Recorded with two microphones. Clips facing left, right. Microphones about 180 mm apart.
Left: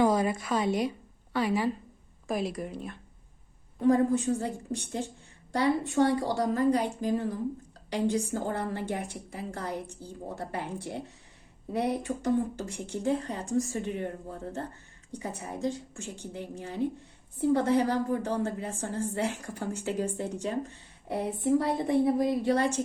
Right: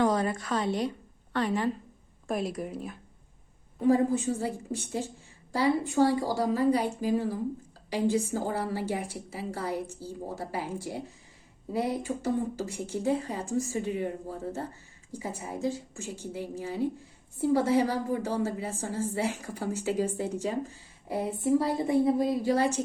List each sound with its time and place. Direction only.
0.0 s a woman's voice: 10° left (ahead or behind); by 14.1 s 10° right (ahead or behind)
15.1 s a woman's voice: centre (ahead or behind)